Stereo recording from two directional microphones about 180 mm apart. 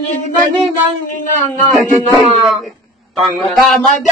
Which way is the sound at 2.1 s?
Centre (ahead or behind).